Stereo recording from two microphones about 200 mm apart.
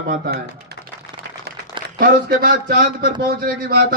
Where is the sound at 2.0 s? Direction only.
50° right (ahead or behind).